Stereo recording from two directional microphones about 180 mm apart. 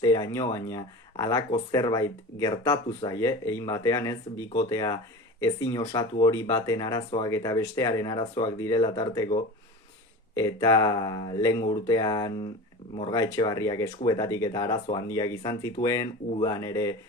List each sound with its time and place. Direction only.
0.0 s speech: 20° left (ahead or behind)